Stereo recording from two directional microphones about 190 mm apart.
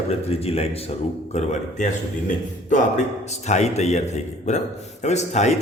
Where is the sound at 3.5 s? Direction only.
35° left (ahead or behind).